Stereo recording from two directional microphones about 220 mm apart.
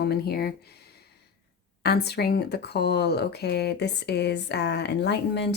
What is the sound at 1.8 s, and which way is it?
Speech, 45° left (ahead or behind).